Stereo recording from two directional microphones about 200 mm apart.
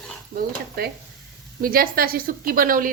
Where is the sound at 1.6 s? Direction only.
45° right (ahead or behind).